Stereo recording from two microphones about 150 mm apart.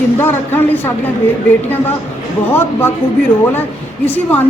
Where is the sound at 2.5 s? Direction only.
15° left (ahead or behind).